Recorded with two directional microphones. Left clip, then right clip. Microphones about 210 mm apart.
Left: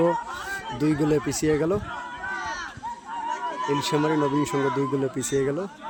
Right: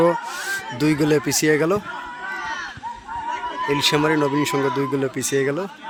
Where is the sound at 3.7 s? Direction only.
Centre (ahead or behind).